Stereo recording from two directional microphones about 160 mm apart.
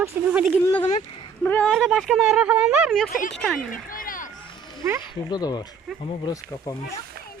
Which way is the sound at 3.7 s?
60° left (ahead or behind).